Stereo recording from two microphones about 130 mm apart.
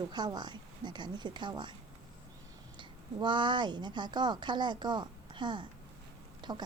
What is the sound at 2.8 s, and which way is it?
A woman's voice, 35° right (ahead or behind).